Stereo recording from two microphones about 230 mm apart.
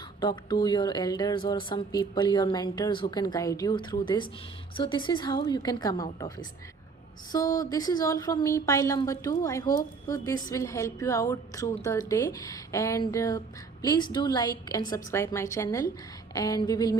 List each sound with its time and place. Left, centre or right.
0.2 s a woman's voice: centre
7.3 s speech: centre